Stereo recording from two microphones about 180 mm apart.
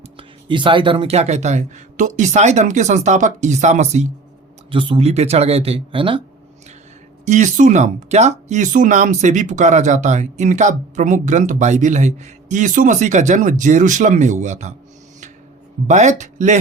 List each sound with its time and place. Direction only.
0.2 s speech: 25° right (ahead or behind)
7.3 s speech: 40° right (ahead or behind)
15.9 s speech: 40° right (ahead or behind)